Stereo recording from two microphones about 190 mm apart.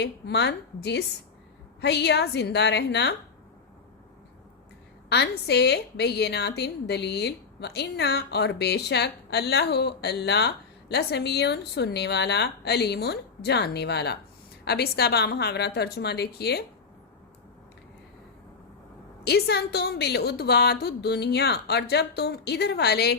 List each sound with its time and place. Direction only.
0.0 s a woman's voice: 65° left (ahead or behind)
5.0 s a woman's voice: 60° left (ahead or behind)
19.2 s a woman's voice: 60° left (ahead or behind)